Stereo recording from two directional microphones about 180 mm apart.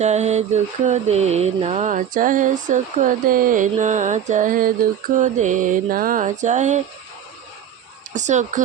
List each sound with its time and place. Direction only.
0.0 s mantra: 40° right (ahead or behind)
8.1 s speech: 40° right (ahead or behind)